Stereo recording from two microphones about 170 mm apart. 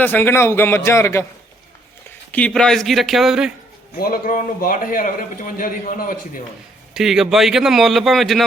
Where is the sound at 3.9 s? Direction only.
60° left (ahead or behind).